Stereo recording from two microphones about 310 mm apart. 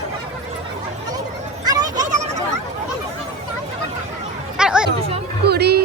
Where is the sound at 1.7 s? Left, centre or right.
Centre.